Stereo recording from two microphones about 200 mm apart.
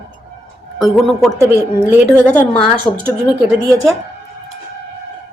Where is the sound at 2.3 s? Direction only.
10° left (ahead or behind).